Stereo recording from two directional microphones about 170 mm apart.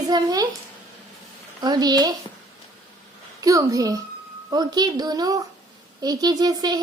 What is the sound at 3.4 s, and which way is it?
Speech, 20° right (ahead or behind).